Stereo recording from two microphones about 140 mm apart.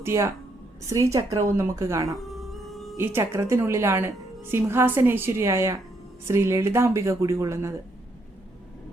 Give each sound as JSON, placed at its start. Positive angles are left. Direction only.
{"t": 0.0, "sound": "a woman's voice", "side_deg": -20}